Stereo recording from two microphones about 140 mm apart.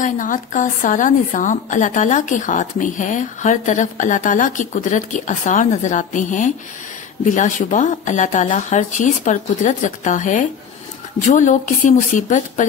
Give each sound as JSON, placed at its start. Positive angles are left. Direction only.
{"t": 0.0, "sound": "a woman's voice", "side_deg": 70}